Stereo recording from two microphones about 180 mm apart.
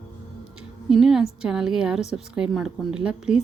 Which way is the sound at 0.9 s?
Centre (ahead or behind).